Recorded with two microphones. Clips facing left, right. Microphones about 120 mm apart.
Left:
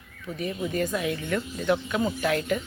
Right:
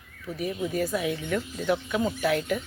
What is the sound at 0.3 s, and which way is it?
Speech, 5° right (ahead or behind).